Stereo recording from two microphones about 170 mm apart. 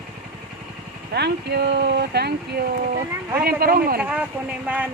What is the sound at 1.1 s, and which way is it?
Speech, 80° right.